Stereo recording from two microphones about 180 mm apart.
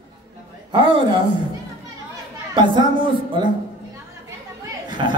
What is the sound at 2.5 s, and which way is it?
Speech, 25° right (ahead or behind).